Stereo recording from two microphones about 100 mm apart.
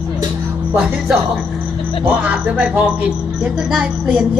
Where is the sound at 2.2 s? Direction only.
15° right (ahead or behind).